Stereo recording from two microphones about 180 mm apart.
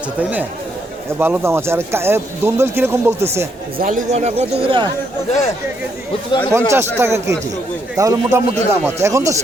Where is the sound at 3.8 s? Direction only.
50° right (ahead or behind); by 4.9 s 30° right (ahead or behind).